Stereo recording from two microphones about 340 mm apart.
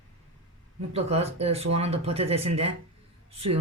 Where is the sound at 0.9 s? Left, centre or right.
Centre.